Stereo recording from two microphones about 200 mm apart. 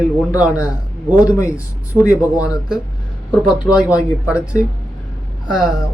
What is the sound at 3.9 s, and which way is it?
Speech, 15° left (ahead or behind).